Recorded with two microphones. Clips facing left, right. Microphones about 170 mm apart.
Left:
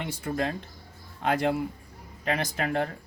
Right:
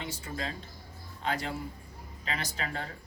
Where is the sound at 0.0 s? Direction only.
60° left (ahead or behind).